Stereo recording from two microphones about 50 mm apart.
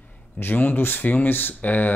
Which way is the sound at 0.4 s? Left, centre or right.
Left.